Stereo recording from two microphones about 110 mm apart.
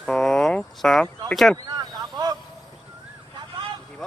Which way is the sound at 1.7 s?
40° right (ahead or behind).